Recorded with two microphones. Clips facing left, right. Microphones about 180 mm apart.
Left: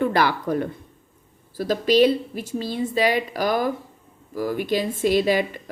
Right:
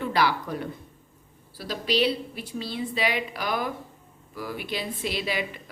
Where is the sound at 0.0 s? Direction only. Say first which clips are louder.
Left 4 dB; 50° left (ahead or behind).